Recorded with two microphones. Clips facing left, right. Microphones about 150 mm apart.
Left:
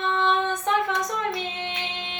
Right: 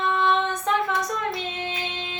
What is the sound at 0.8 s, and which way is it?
Female singing, 20° left (ahead or behind).